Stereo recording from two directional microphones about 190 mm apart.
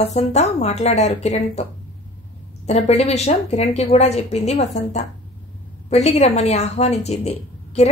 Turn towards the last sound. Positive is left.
turn(degrees=35)  # may be behind; listen again after turning